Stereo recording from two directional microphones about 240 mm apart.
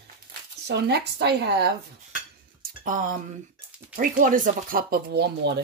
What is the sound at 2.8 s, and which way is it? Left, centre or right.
Speech, right.